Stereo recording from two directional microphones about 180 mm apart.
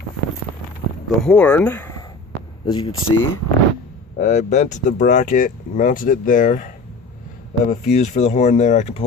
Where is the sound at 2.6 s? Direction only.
25° left (ahead or behind).